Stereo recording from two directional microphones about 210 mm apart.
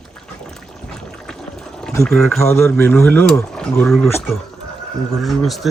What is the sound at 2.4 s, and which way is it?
Speech, 10° left (ahead or behind).